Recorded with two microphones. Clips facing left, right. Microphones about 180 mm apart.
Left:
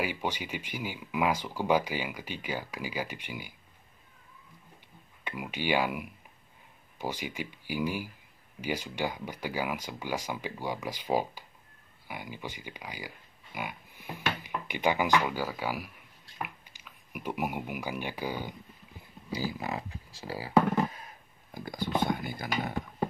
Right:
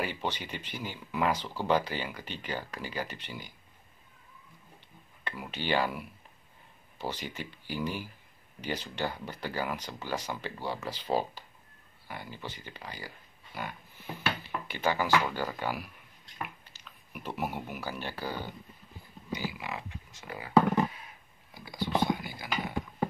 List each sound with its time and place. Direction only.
0.0 s speech: 10° left (ahead or behind)
5.2 s speech: 10° left (ahead or behind)
19.3 s speech: 35° left (ahead or behind)
21.5 s speech: 50° left (ahead or behind)